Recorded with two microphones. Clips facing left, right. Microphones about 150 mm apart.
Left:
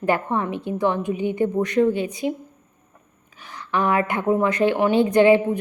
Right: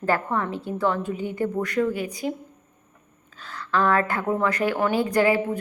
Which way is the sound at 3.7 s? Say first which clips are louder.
Left 1 dB; 15° left (ahead or behind).